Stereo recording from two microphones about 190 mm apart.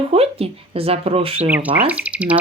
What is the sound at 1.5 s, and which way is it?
Speech, 10° right (ahead or behind).